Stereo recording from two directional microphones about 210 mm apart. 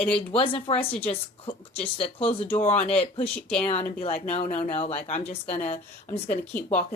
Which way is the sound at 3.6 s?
30° left (ahead or behind).